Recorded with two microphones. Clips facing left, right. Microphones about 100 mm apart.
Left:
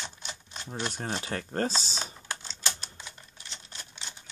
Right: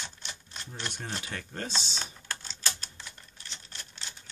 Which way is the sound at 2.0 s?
15° left (ahead or behind).